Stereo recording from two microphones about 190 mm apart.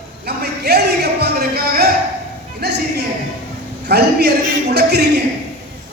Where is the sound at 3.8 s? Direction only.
60° right (ahead or behind).